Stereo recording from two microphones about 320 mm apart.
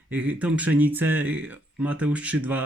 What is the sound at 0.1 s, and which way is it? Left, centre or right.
Speech, centre.